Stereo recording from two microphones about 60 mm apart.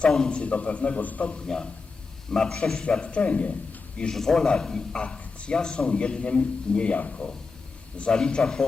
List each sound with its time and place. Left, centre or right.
0.1 s a man's voice: centre
4.1 s a man's voice: centre